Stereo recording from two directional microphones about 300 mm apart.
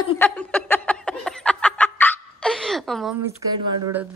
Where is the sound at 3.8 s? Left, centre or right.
Centre.